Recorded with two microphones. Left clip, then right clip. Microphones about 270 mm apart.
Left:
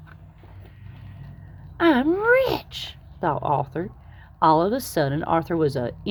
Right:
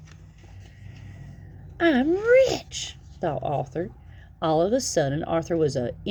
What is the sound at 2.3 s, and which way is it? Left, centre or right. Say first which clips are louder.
Speech: right 1 dB; centre.